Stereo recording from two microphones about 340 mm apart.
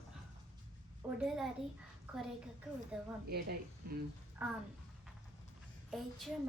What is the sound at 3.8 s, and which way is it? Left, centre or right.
Speech, right.